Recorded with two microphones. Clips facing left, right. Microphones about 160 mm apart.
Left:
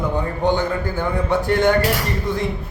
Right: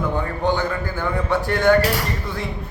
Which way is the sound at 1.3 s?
20° left (ahead or behind).